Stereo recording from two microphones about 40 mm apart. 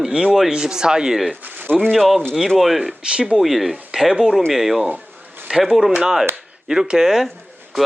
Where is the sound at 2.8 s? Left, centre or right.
Right.